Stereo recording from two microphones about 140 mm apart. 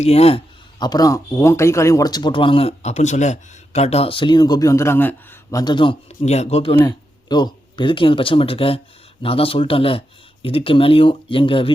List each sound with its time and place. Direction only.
0.0 s speech: 45° left (ahead or behind)
0.8 s speech: 30° left (ahead or behind)
6.2 s speech: 50° left (ahead or behind)
7.3 s speech: 30° left (ahead or behind)